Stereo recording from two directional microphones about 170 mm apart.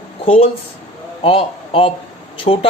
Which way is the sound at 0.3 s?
35° left (ahead or behind).